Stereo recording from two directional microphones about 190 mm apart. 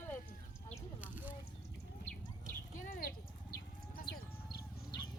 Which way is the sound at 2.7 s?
45° left (ahead or behind).